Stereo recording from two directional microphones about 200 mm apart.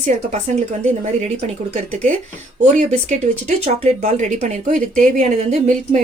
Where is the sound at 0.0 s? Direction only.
35° right (ahead or behind).